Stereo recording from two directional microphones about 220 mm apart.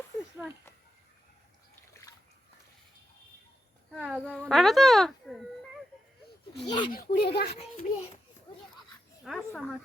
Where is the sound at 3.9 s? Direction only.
5° right (ahead or behind).